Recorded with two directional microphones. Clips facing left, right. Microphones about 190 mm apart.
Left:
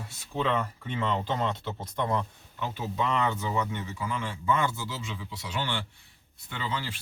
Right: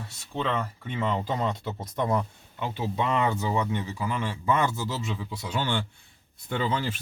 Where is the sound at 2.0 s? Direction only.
20° right (ahead or behind).